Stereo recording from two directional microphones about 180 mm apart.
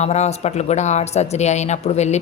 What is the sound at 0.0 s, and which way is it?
A woman's voice, 40° left (ahead or behind).